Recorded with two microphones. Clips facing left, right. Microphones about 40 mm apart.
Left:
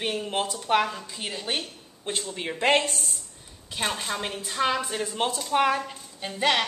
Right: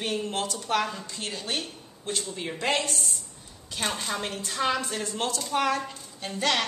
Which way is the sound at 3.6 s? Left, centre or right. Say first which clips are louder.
Left 1 dB; centre.